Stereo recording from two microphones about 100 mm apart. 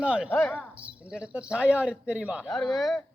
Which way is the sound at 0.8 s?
10° right (ahead or behind).